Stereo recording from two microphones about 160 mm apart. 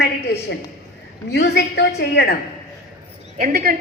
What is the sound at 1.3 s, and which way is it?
A woman's voice, 90° left.